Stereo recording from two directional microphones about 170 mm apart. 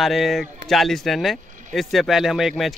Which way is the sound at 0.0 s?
Centre (ahead or behind).